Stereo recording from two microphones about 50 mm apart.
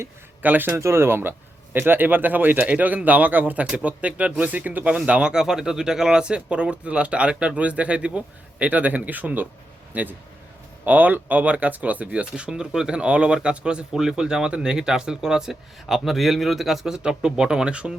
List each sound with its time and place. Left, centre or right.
0.4 s speech: right
0.7 s speech: right